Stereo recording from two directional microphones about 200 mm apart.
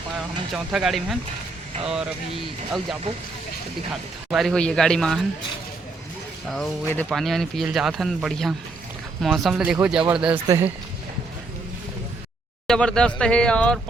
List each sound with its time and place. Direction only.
0.5 s speech: centre (ahead or behind)
4.3 s speech: centre (ahead or behind)
6.5 s speech: 5° left (ahead or behind)
10.3 s speech: 20° right (ahead or behind)
12.6 s speech: 5° left (ahead or behind)